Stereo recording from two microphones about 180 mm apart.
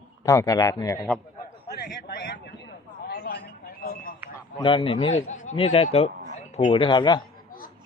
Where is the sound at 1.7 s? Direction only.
70° left (ahead or behind).